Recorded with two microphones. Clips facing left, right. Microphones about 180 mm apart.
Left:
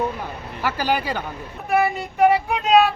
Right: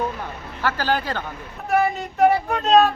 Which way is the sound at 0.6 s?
15° left (ahead or behind).